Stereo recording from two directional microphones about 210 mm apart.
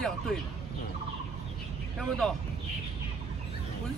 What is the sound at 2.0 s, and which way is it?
Speech, centre (ahead or behind).